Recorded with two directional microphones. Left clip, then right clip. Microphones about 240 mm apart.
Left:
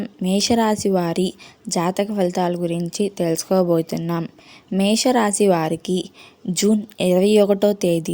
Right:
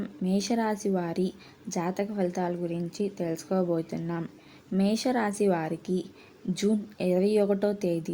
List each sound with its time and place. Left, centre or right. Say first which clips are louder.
0.0 s a woman's voice: left 9 dB; left